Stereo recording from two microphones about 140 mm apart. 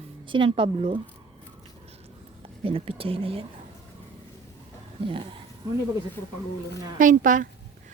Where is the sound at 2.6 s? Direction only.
40° right (ahead or behind).